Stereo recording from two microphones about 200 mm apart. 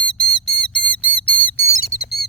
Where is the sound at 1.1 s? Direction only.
10° left (ahead or behind).